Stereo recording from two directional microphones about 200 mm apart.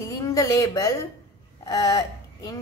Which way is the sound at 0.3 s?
15° left (ahead or behind).